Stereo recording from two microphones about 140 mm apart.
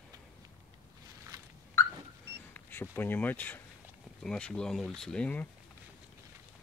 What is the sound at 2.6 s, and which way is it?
Speech, 15° left (ahead or behind).